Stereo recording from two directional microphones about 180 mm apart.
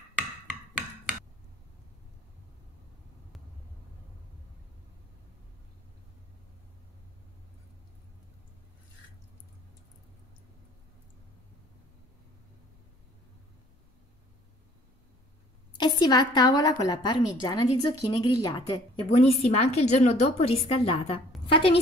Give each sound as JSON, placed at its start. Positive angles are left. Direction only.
{"t": 15.8, "sound": "a woman's voice", "side_deg": 20}
{"t": 19.0, "sound": "a woman's voice", "side_deg": 35}